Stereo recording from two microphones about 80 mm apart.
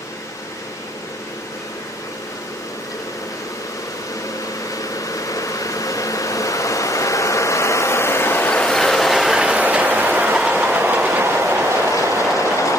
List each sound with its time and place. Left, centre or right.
5.0 s a sound: left
8.5 s ratchet: centre
8.7 s train: centre; by 11.6 s right
11.9 s train: left